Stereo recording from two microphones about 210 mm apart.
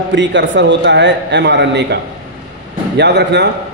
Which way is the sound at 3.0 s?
55° right (ahead or behind).